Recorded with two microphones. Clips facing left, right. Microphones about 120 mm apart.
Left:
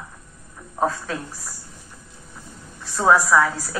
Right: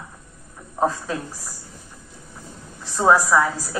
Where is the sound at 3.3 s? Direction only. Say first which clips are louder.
Left 1 dB; 15° right (ahead or behind).